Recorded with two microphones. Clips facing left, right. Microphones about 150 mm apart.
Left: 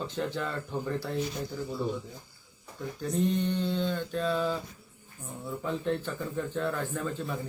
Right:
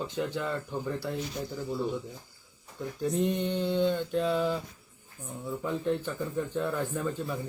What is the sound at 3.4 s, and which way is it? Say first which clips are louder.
Speech: right 2 dB; 15° right (ahead or behind).